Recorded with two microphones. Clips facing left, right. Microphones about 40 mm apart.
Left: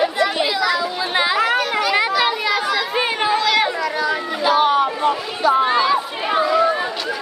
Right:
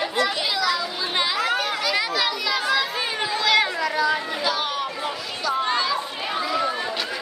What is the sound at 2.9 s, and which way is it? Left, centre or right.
Children playing, left.